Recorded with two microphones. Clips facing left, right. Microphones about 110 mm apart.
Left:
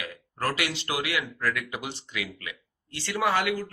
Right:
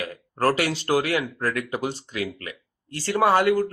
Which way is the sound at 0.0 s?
40° right (ahead or behind).